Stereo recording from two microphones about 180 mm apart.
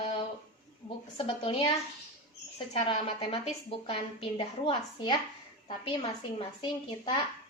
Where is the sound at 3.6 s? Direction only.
30° left (ahead or behind).